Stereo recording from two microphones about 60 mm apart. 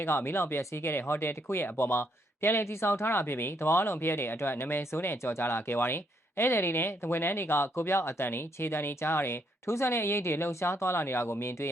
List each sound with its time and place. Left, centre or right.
0.0 s speech: left